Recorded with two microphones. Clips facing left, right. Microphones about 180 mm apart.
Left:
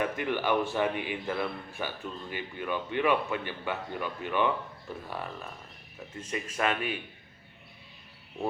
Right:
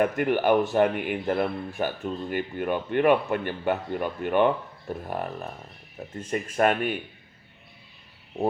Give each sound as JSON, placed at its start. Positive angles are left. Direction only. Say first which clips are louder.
{"t": 0.0, "sound": "speech", "louder": "right 7 dB", "side_deg": -50}
{"t": 6.0, "sound": "speech", "louder": "right 6 dB", "side_deg": -35}
{"t": 6.3, "sound": "speech", "louder": "right 7 dB", "side_deg": -50}